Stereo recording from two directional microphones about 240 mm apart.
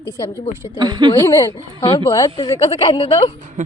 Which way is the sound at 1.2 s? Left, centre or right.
Centre.